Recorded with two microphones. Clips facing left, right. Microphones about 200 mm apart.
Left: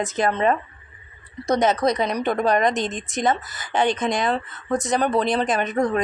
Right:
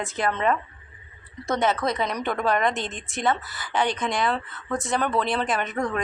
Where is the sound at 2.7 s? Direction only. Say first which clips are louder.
Left 6 dB; 15° left (ahead or behind).